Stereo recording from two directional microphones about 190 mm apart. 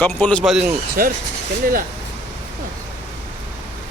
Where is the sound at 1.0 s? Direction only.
50° right (ahead or behind).